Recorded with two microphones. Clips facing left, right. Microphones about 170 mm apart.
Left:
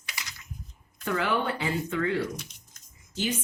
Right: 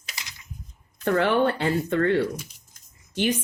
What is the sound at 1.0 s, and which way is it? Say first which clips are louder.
Speech: right 7 dB; 65° right (ahead or behind).